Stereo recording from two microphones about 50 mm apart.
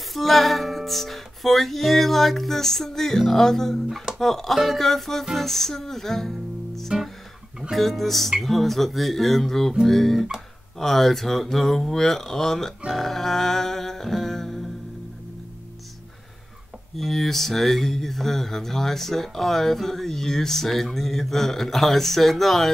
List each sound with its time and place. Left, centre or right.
0.1 s speech: centre
16.9 s speech: centre